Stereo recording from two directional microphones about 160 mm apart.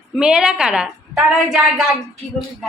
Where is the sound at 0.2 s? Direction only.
5° right (ahead or behind).